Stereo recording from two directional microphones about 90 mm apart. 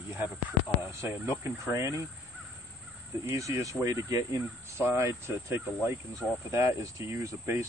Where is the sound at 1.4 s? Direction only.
35° right (ahead or behind).